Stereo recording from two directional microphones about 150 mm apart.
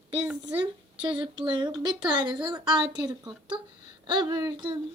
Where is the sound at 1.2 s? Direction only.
30° right (ahead or behind).